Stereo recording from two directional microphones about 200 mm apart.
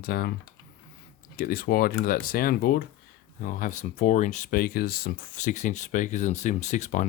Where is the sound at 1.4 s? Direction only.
45° left (ahead or behind).